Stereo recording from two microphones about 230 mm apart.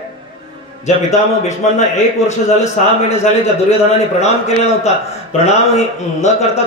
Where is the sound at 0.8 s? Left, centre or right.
Left.